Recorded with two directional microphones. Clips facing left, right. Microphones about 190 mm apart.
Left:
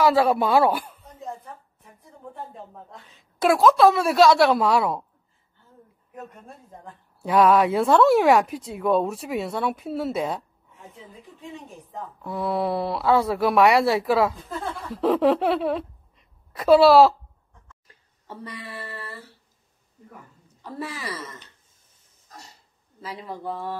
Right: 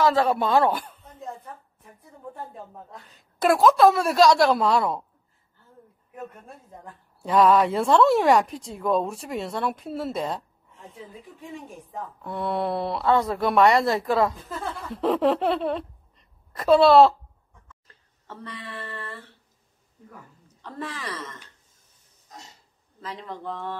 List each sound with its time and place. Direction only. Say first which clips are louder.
0.0 s a woman's voice: left 2 dB; 10° left (ahead or behind)
6.1 s a woman's voice: right 1 dB; centre (ahead or behind)
20.6 s speech: left 1 dB; 10° left (ahead or behind)
22.3 s dog: right 1 dB; 20° right (ahead or behind)
22.9 s speech: left 1 dB; 10° left (ahead or behind)